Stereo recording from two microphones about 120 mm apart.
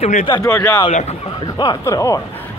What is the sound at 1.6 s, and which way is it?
Speech, 30° left (ahead or behind).